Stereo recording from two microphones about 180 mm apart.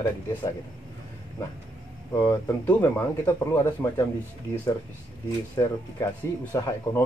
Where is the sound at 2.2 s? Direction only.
15° left (ahead or behind).